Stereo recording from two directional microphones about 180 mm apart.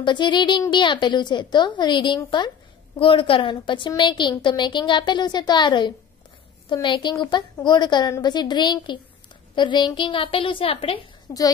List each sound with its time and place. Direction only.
0.0 s a woman's voice: 25° left (ahead or behind)
11.3 s a woman's voice: 20° left (ahead or behind)